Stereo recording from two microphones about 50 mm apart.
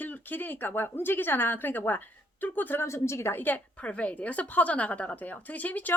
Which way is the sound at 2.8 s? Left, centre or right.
Left.